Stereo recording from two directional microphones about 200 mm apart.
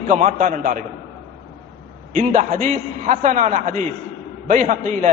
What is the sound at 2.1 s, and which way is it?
A man's voice, 35° right (ahead or behind).